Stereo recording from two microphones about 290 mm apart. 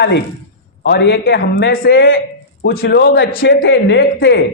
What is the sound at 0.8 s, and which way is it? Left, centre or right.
A man's voice, left.